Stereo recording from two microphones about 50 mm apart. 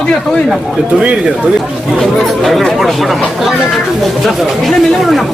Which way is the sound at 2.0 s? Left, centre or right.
Centre.